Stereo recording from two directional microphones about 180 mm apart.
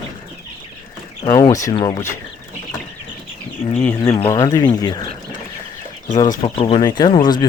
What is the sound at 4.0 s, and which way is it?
Speech, 20° left (ahead or behind).